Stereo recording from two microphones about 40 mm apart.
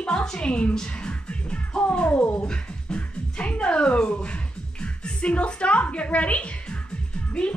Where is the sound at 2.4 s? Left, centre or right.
Left.